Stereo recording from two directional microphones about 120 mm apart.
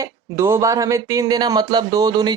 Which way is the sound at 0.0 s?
25° right (ahead or behind).